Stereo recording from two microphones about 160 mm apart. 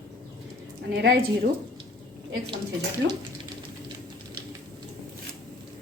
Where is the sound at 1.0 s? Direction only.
90° right.